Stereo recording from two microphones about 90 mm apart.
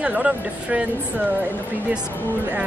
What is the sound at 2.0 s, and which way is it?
Speech, 25° left (ahead or behind).